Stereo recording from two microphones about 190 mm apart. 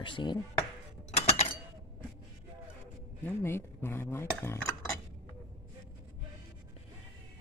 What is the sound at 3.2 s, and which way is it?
Speech, 10° left (ahead or behind).